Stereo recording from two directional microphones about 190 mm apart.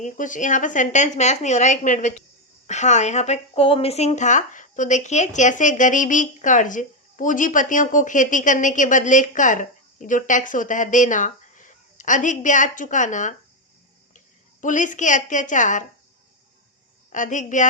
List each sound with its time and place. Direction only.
0.0 s speech: 40° left (ahead or behind)
14.6 s speech: 40° left (ahead or behind)
17.1 s speech: 40° left (ahead or behind)